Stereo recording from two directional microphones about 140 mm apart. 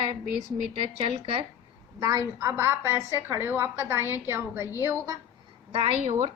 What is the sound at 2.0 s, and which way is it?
A woman's voice, 25° right (ahead or behind).